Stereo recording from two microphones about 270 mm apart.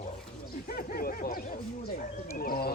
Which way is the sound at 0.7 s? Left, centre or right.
Left.